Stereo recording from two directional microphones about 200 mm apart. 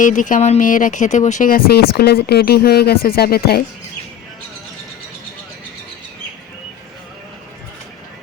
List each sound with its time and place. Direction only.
0.0 s speech: 40° left (ahead or behind)